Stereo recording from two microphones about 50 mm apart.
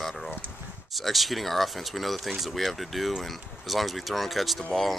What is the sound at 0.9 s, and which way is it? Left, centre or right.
Speech, centre.